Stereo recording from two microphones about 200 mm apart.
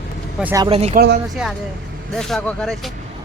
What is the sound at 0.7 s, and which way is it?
Speech, 30° right (ahead or behind).